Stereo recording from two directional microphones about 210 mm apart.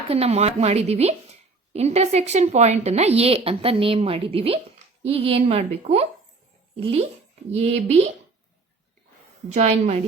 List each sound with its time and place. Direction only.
0.1 s speech: 30° right (ahead or behind)
9.5 s speech: 35° right (ahead or behind)